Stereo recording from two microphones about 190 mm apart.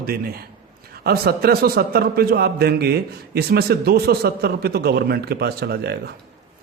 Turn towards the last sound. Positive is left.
turn(degrees=-55)  # may be behind; listen again after turning